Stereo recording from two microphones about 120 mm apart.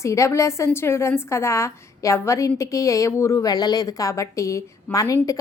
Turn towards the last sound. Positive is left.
turn(degrees=25)  # may be behind; listen again after turning